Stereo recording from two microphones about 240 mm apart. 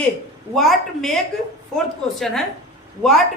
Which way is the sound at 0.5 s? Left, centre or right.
Centre.